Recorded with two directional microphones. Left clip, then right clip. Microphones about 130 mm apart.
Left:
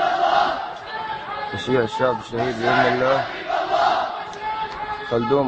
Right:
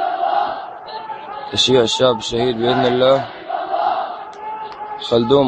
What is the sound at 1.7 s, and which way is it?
Speech, 15° right (ahead or behind).